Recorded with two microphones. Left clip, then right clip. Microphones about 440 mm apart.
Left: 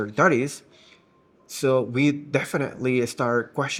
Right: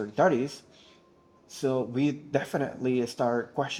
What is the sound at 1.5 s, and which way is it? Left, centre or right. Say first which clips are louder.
A man's voice: left 7 dB; left.